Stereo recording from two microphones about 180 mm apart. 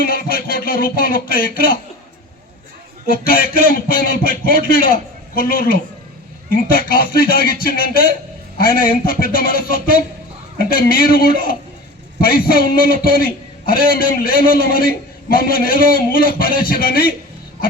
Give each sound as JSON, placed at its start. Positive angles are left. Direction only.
{"t": 0.0, "sound": "speech", "side_deg": 55}
{"t": 3.1, "sound": "a man's voice", "side_deg": 55}